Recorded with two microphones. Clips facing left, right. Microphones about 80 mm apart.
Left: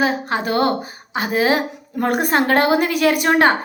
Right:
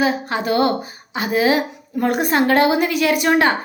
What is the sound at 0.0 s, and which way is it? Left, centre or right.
A woman's voice, left.